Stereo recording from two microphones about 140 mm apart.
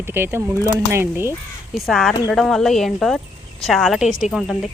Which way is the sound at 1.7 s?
Centre (ahead or behind).